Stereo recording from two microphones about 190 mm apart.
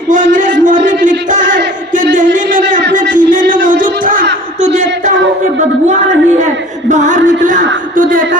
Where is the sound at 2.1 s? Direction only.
45° right (ahead or behind).